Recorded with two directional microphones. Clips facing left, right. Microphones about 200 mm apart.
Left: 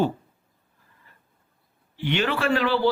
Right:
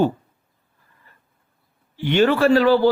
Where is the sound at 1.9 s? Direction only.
45° right (ahead or behind).